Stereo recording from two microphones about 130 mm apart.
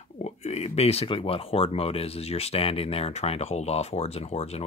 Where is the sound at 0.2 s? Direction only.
55° left (ahead or behind).